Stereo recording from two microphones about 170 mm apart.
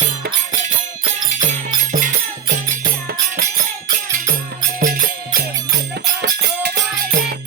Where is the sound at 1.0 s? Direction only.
45° right (ahead or behind).